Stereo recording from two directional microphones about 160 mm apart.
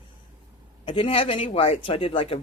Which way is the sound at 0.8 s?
35° left (ahead or behind).